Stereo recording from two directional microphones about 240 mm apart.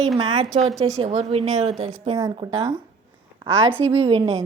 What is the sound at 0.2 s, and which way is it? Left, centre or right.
A woman's voice, centre.